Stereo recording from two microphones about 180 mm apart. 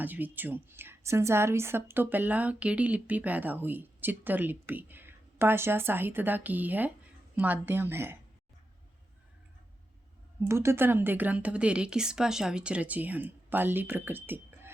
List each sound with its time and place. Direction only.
0.0 s a woman's voice: 10° right (ahead or behind)
10.5 s a woman's voice: 15° right (ahead or behind)